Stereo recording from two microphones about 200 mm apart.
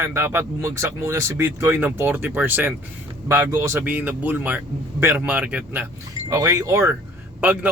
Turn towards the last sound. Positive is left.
turn(degrees=-5)  # may be behind; listen again after turning